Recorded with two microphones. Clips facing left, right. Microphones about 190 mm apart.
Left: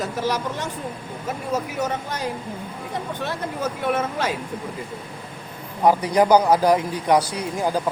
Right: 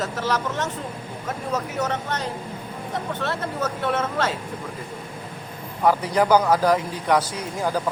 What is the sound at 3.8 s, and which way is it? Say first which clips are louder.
Speech: left 1 dB; 10° left (ahead or behind).